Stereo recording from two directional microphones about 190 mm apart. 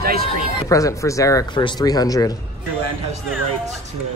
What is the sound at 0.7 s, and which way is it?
Speech, 15° left (ahead or behind).